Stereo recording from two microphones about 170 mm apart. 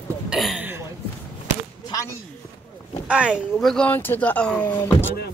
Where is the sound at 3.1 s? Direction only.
5° right (ahead or behind); by 5.1 s 10° left (ahead or behind).